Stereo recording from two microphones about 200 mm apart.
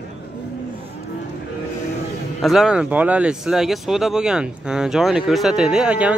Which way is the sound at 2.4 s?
Centre (ahead or behind).